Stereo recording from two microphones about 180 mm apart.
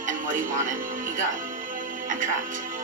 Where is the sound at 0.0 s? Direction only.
45° right (ahead or behind).